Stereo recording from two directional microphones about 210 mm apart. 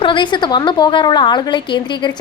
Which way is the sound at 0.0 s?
25° left (ahead or behind).